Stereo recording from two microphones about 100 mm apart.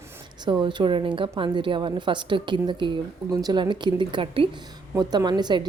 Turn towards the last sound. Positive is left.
turn(degrees=-45)  # may be behind; listen again after turning